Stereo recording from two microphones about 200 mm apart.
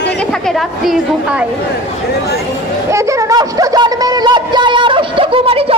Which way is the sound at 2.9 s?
15° right (ahead or behind).